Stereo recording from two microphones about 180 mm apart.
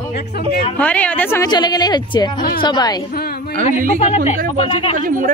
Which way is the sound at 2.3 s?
55° left (ahead or behind).